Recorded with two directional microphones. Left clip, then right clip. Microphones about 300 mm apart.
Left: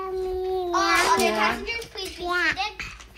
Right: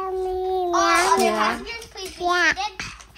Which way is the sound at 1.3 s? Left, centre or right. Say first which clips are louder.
Right 1 dB; centre.